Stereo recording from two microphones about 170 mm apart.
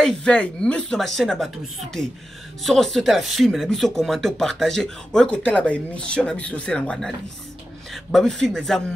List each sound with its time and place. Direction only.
0.0 s speech: 5° left (ahead or behind)